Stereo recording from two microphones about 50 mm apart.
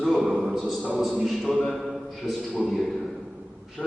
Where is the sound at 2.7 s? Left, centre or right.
Centre.